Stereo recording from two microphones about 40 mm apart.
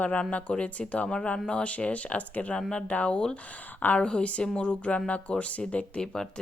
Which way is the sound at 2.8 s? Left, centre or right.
Left.